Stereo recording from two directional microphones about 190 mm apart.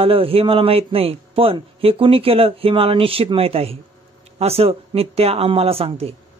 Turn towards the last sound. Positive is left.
turn(degrees=-30)  # may be behind; listen again after turning